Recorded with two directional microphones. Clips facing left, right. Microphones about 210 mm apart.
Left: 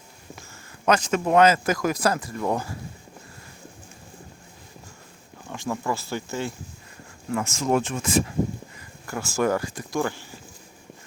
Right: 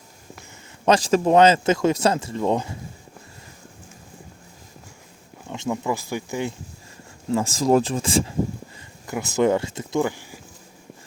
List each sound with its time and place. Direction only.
0.9 s speech: 30° right (ahead or behind)
5.5 s speech: 20° right (ahead or behind)
7.3 s speech: 30° right (ahead or behind)
9.0 s speech: 20° right (ahead or behind)